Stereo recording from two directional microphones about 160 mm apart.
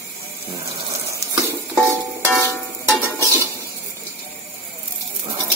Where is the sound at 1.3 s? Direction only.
15° right (ahead or behind).